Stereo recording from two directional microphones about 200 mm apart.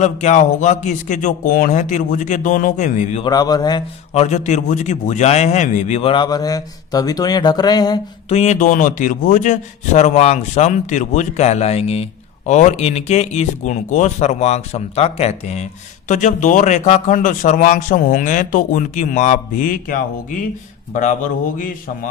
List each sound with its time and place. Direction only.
0.0 s a man's voice: 35° left (ahead or behind)
3.2 s a man's voice: 20° left (ahead or behind)
4.1 s a man's voice: 35° left (ahead or behind)
8.3 s a man's voice: 35° left (ahead or behind)